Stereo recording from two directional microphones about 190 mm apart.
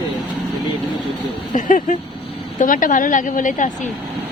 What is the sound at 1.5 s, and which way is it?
A woman's voice, 45° left (ahead or behind).